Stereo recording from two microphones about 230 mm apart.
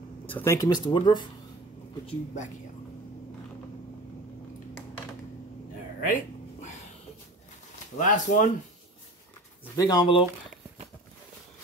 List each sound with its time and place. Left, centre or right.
0.3 s speech: centre
2.0 s speech: left
5.9 s dog: left
8.0 s speech: left
9.8 s speech: centre